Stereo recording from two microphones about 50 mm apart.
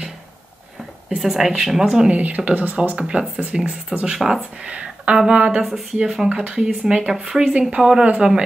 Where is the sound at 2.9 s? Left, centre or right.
Centre.